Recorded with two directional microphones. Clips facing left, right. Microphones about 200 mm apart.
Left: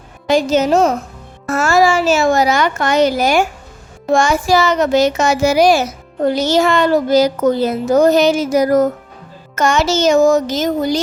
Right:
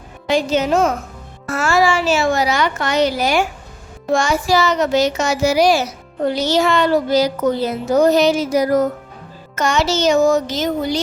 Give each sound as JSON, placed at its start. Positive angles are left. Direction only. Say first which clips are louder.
{"t": 0.3, "sound": "a woman's voice", "louder": "left 3 dB", "side_deg": 45}